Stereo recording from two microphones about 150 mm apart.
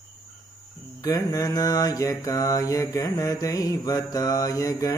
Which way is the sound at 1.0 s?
25° left (ahead or behind).